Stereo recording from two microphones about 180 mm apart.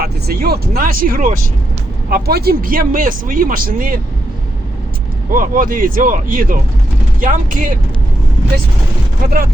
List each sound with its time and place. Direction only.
0.0 s speech: 60° right (ahead or behind)
5.3 s speech: 50° right (ahead or behind)